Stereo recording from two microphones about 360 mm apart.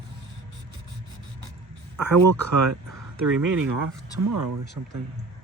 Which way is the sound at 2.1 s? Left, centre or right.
Right.